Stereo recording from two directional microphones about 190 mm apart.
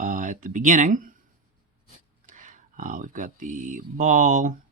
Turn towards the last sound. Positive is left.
turn(degrees=-40)  # may be behind; listen again after turning